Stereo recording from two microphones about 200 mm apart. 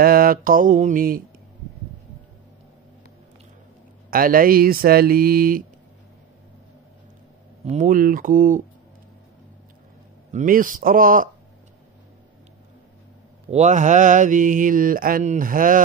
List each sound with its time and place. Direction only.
0.0 s speech: 45° right (ahead or behind)
4.1 s speech: 45° right (ahead or behind)
7.6 s speech: 35° right (ahead or behind)
10.3 s speech: 45° right (ahead or behind)
13.5 s mantra: 35° right (ahead or behind)